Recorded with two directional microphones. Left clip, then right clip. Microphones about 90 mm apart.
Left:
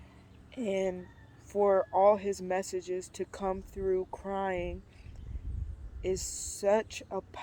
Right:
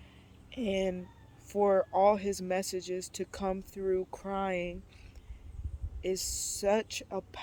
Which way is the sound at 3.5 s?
45° right (ahead or behind).